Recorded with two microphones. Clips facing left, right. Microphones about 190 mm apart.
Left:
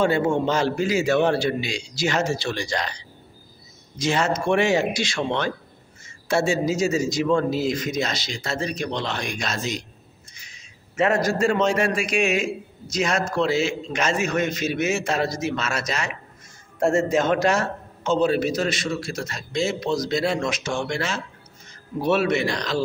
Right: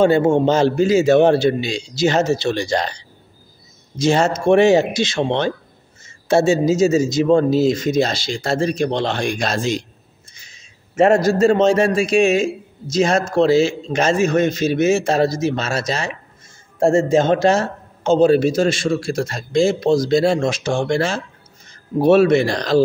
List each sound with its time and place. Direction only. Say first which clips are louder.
0.3 s a man's voice: right 7 dB; 25° right (ahead or behind)
4.0 s a man's voice: right 6 dB; 25° right (ahead or behind)
11.1 s a man's voice: right 7 dB; 25° right (ahead or behind)